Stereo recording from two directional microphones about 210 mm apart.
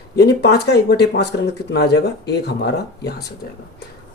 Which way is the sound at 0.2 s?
55° left (ahead or behind).